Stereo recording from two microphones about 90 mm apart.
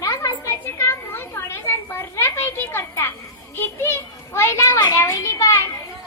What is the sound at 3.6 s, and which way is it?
Children playing, 25° left (ahead or behind).